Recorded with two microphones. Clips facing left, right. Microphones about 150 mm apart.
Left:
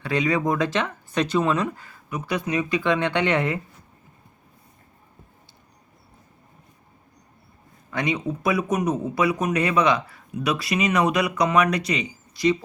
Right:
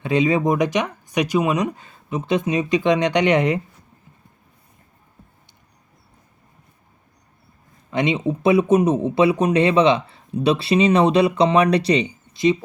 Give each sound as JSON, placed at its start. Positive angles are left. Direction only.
{"t": 0.0, "sound": "speech", "side_deg": -20}
{"t": 7.9, "sound": "speech", "side_deg": -20}